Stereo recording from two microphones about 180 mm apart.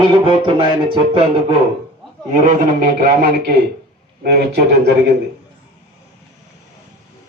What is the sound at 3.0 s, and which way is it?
Speech, 55° right (ahead or behind).